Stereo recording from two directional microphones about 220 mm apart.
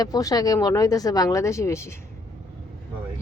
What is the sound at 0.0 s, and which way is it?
Speech, 15° left (ahead or behind).